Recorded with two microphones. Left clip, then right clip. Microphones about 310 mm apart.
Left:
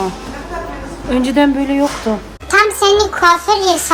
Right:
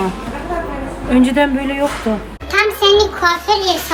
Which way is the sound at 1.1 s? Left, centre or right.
Left.